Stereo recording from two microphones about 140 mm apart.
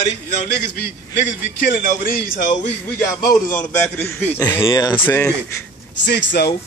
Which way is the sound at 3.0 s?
20° left (ahead or behind).